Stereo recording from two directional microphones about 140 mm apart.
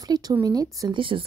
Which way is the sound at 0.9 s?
40° right (ahead or behind).